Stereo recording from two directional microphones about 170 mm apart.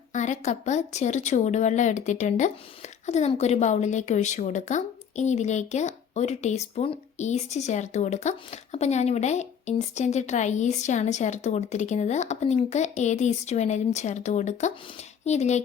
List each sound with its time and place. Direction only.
0.1 s speech: 45° left (ahead or behind)